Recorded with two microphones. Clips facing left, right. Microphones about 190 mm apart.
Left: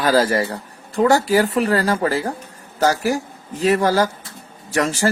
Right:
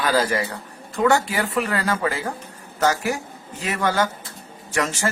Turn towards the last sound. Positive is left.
turn(degrees=35)  # may be behind; listen again after turning